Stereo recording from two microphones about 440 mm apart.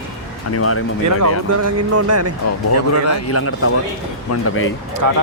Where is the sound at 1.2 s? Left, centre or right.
Right.